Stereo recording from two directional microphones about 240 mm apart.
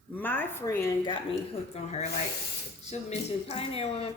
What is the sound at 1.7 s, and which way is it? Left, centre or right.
A woman's voice, left.